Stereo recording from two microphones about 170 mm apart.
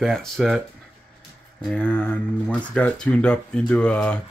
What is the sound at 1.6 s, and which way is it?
Speech, 10° left (ahead or behind).